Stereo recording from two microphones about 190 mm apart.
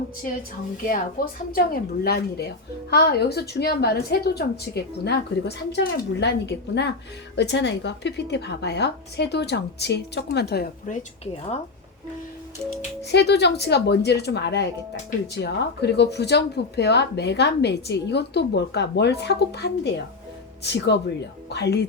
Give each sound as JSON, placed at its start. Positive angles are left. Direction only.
{"t": 0.9, "sound": "speech", "side_deg": 50}
{"t": 13.1, "sound": "speech", "side_deg": 60}